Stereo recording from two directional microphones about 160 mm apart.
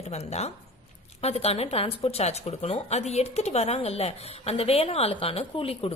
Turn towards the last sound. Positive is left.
turn(degrees=35)  # may be behind; listen again after turning